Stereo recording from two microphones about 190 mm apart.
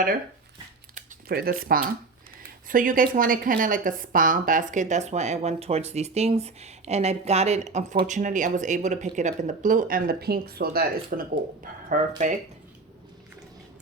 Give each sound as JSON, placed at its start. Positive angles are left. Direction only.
{"t": 0.9, "sound": "speech", "side_deg": -50}